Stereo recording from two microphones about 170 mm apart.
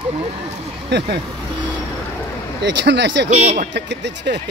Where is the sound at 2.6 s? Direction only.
90° right.